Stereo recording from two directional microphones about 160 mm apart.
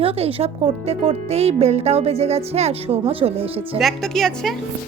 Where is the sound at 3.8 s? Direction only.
Centre (ahead or behind).